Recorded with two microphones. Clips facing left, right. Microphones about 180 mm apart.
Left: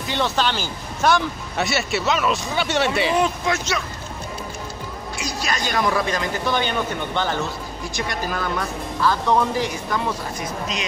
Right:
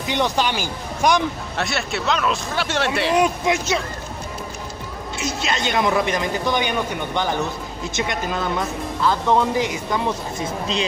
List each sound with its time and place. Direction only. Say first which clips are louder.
0.0 s speech: right 1 dB; 15° right (ahead or behind)
1.6 s speech: left 2 dB; centre (ahead or behind)
3.2 s speech: right 2 dB; 15° right (ahead or behind)
5.1 s speech: right 2 dB; 25° right (ahead or behind)